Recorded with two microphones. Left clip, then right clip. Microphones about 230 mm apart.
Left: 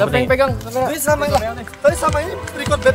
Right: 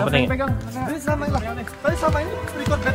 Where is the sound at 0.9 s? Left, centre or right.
Left.